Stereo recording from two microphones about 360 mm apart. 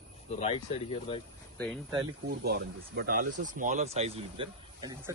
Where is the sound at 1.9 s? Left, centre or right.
Right.